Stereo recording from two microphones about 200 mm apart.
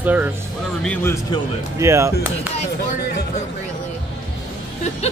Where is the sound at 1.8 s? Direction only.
15° right (ahead or behind).